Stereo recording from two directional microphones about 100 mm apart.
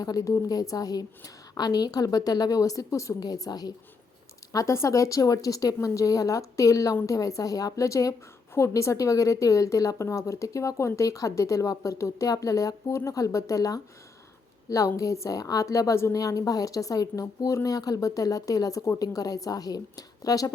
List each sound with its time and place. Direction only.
0.0 s a woman's voice: 35° left (ahead or behind)
4.5 s a woman's voice: 30° left (ahead or behind)